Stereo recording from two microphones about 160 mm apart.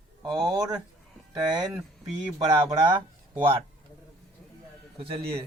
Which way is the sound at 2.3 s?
20° right (ahead or behind).